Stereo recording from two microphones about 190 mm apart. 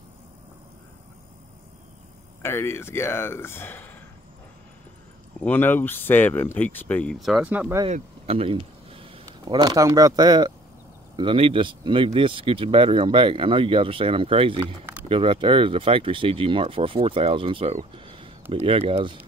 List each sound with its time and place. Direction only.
2.4 s speech: 15° left (ahead or behind)
5.4 s speech: 10° left (ahead or behind); by 7.8 s 10° right (ahead or behind)
7.9 s speech: 30° right (ahead or behind)
17.9 s a sound: 25° right (ahead or behind)